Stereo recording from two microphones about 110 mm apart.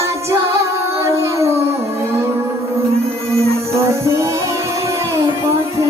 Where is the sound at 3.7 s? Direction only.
25° right (ahead or behind).